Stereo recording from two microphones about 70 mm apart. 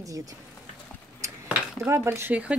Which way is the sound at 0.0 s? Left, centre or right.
Right.